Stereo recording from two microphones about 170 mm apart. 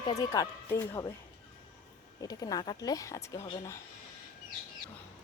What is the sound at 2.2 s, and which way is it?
Speech, 20° left (ahead or behind).